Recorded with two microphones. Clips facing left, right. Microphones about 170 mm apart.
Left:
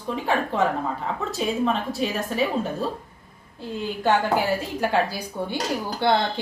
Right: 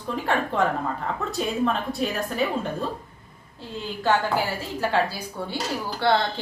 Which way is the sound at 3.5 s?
15° left (ahead or behind).